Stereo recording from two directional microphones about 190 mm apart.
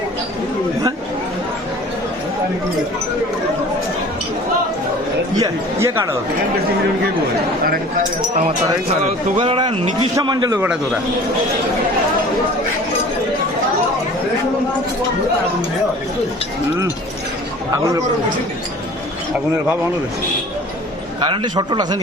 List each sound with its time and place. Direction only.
5.4 s chatter: 15° right (ahead or behind)
9.4 s speech: 30° right (ahead or behind)
21.2 s speech: 25° right (ahead or behind)